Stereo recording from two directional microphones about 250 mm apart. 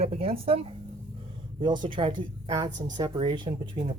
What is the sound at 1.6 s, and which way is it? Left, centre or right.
Speech, centre.